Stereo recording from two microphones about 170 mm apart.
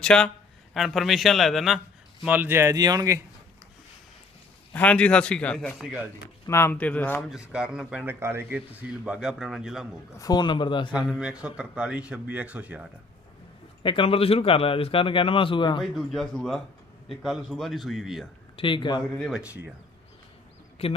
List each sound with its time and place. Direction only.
0.0 s a man's voice: 5° left (ahead or behind); by 3.2 s 20° right (ahead or behind)
4.7 s a man's voice: 10° left (ahead or behind)
6.4 s a man's voice: 15° left (ahead or behind)
7.2 s a man's voice: 5° right (ahead or behind)
10.2 s speech: 25° left (ahead or behind)
10.9 s a man's voice: 5° right (ahead or behind)
13.8 s speech: 30° left (ahead or behind)
15.8 s a man's voice: centre (ahead or behind)
18.5 s speech: 30° left (ahead or behind)
19.1 s a man's voice: centre (ahead or behind)
20.8 s speech: 35° left (ahead or behind)